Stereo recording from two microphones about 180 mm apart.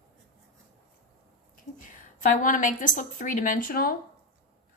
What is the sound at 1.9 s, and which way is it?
A woman's voice, 45° left (ahead or behind).